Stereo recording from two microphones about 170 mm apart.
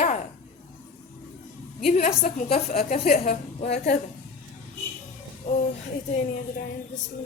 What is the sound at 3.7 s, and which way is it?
Speech, 70° left (ahead or behind).